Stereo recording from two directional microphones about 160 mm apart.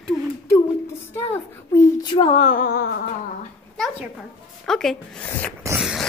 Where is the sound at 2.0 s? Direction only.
30° left (ahead or behind).